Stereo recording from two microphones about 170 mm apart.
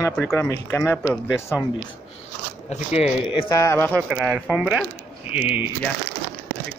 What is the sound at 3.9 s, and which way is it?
Speech, 15° right (ahead or behind).